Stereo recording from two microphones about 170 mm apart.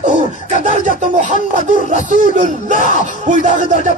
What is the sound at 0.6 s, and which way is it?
Music, 45° right (ahead or behind).